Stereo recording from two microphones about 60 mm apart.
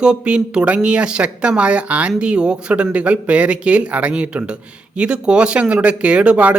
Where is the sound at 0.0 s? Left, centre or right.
Centre.